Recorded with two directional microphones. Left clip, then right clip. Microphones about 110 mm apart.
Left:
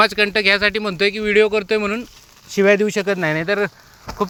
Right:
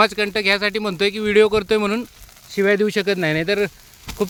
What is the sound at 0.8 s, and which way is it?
Speech, 25° right (ahead or behind).